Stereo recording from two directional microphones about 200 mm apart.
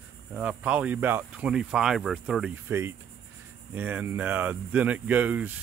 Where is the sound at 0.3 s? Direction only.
5° right (ahead or behind).